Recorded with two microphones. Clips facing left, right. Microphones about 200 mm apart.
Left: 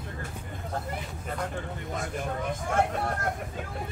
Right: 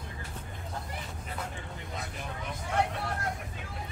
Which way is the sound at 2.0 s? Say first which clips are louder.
Left 8 dB; 50° left (ahead or behind).